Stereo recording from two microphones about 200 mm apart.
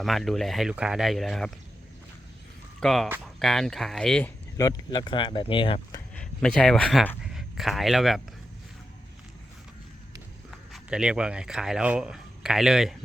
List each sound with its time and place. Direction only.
0.0 s speech: centre (ahead or behind)
2.8 s speech: centre (ahead or behind)
4.5 s speech: 20° left (ahead or behind)
5.9 s speech: 5° left (ahead or behind)
10.7 s speech: 5° right (ahead or behind)